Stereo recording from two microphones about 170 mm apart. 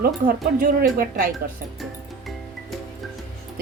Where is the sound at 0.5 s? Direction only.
55° right (ahead or behind).